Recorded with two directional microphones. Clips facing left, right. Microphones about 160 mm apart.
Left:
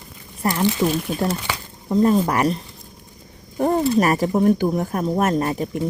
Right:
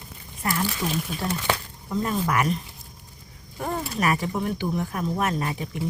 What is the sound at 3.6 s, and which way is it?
Speech, 35° left (ahead or behind).